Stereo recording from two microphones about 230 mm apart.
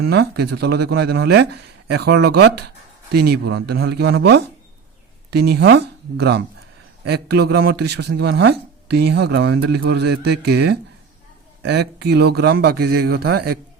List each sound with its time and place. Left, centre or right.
0.0 s speech: right